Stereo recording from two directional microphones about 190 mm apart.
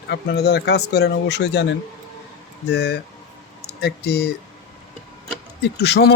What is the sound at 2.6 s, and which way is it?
Speech, 60° left (ahead or behind).